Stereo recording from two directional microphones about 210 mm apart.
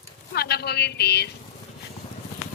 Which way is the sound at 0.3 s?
50° left (ahead or behind).